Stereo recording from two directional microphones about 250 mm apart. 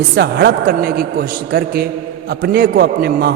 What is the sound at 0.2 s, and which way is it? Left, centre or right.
A man's voice, right.